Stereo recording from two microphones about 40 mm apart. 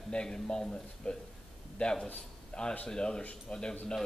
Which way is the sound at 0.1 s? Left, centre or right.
Centre.